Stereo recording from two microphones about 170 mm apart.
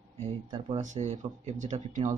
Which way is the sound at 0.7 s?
45° right (ahead or behind).